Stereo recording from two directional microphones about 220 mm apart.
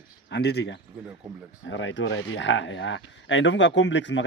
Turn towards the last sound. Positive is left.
turn(degrees=55)  # may be behind; listen again after turning